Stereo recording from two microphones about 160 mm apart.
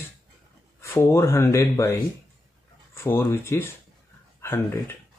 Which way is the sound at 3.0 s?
15° left (ahead or behind).